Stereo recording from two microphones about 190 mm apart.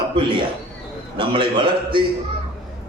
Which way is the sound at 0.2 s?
25° right (ahead or behind).